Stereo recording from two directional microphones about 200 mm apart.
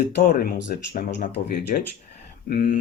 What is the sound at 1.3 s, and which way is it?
Speech, 55° left (ahead or behind).